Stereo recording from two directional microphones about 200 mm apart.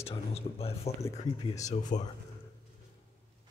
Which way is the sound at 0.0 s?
30° left (ahead or behind).